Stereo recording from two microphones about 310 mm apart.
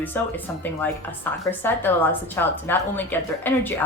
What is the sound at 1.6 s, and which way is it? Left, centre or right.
Speech, centre.